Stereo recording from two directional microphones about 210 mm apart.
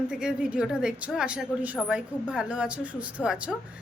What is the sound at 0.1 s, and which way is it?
A woman's voice, 5° right (ahead or behind).